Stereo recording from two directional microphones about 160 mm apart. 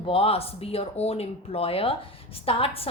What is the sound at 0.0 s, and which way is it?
A woman's voice, 35° left (ahead or behind).